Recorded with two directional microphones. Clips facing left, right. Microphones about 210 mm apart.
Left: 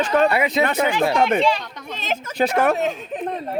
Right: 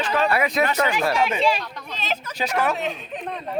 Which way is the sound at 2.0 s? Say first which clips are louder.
Left 6 dB; 50° left (ahead or behind).